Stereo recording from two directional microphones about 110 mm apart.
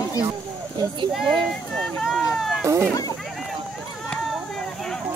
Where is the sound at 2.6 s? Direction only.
25° right (ahead or behind).